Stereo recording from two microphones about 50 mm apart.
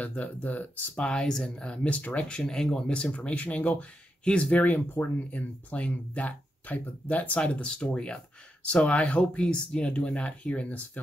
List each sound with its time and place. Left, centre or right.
0.0 s speech: left
0.9 s speech: centre
2.3 s speech: centre